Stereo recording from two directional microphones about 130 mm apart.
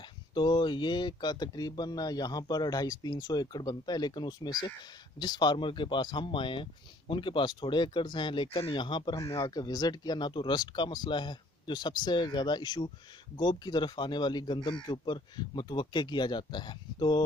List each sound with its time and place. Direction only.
0.3 s speech: 35° left (ahead or behind)